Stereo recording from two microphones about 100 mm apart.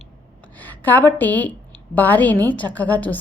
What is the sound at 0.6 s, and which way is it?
A woman's voice, 15° left (ahead or behind).